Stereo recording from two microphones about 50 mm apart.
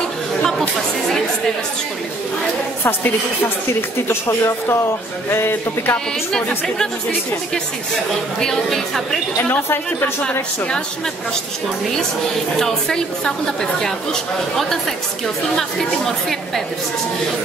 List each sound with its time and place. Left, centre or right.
0.4 s chatter: centre
2.8 s a woman's voice: left
4.1 s speech: left
5.3 s a woman's voice: left
8.4 s a woman's voice: centre
9.4 s a woman's voice: left
12.5 s a woman's voice: centre